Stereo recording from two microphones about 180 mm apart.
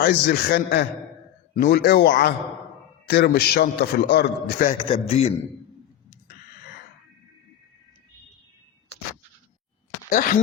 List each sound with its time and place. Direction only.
0.0 s a man's voice: 60° left (ahead or behind)
4.9 s a man's voice: 35° left (ahead or behind)
10.1 s speech: 50° left (ahead or behind)